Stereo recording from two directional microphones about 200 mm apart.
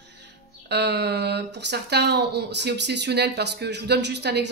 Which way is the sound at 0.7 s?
55° right (ahead or behind).